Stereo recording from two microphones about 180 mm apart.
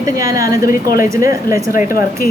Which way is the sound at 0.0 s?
20° right (ahead or behind).